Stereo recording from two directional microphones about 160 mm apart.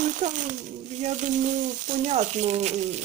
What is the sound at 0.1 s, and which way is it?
Speech, 50° right (ahead or behind).